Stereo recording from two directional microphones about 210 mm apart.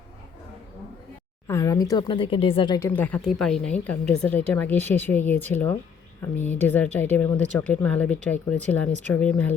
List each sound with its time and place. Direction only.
1.5 s speech: 15° left (ahead or behind)